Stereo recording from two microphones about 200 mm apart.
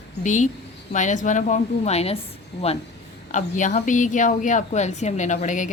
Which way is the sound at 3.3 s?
40° left (ahead or behind).